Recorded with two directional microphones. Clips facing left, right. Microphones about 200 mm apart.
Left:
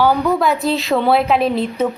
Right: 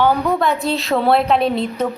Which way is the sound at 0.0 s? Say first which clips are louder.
Left 1 dB; 5° left (ahead or behind).